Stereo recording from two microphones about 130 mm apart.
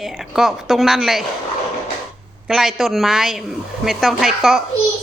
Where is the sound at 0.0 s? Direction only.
Centre (ahead or behind).